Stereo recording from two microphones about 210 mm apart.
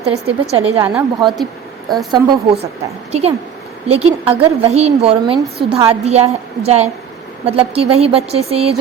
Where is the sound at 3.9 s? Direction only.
25° right (ahead or behind).